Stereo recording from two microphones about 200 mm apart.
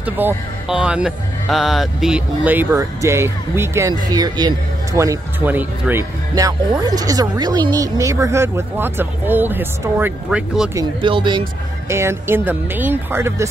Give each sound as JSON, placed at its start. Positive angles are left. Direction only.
{"t": 0.2, "sound": "speech", "side_deg": -10}
{"t": 10.7, "sound": "speech", "side_deg": -20}
{"t": 11.9, "sound": "speech", "side_deg": -15}